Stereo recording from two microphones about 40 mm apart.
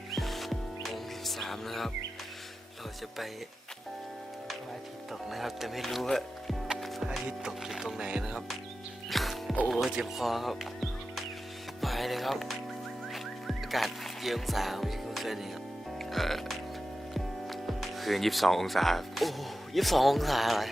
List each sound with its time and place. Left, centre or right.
0.1 s music: centre
5.3 s speech: centre
7.4 s speech: centre
7.9 s music: centre
9.0 s music: centre
9.6 s speech: centre
13.1 s music: centre
17.2 s speech: centre